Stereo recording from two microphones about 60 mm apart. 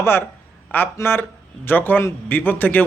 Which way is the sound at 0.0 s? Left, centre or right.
Left.